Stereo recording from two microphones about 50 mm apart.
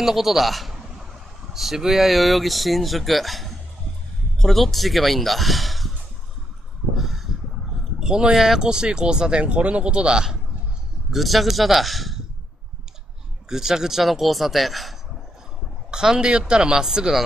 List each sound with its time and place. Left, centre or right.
0.0 s a man's voice: centre
7.0 s a sound: centre
8.0 s speech: centre
11.1 s speech: centre
13.5 s speech: centre
15.9 s speech: centre